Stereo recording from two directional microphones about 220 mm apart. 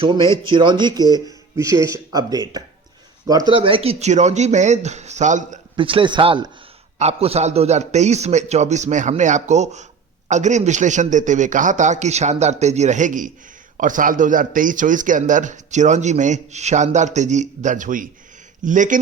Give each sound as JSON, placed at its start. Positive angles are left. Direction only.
{"t": 0.0, "sound": "a man's voice", "side_deg": -20}
{"t": 5.7, "sound": "a man's voice", "side_deg": -25}